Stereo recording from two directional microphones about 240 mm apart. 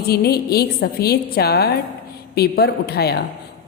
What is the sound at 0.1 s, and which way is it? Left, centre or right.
A woman's voice, left.